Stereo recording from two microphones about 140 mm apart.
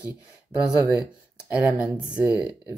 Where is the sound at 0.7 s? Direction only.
25° left (ahead or behind).